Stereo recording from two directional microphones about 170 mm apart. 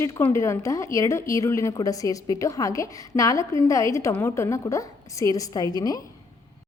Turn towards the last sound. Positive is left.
turn(degrees=20)  # may be behind; listen again after turning